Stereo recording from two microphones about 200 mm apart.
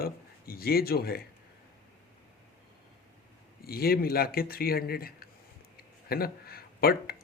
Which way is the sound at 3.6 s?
50° left (ahead or behind).